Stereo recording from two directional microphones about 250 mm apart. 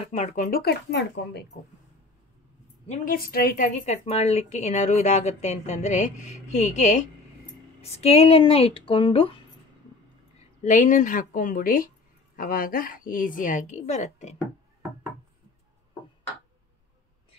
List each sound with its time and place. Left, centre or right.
0.0 s speech: left
2.9 s a woman's voice: left
10.6 s speech: left